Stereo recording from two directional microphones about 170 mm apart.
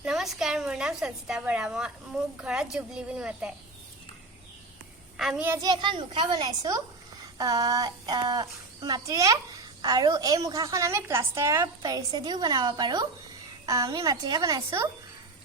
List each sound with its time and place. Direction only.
0.0 s a woman's voice: centre (ahead or behind)
5.1 s a woman's voice: centre (ahead or behind)
5.5 s a woman's voice: 25° right (ahead or behind)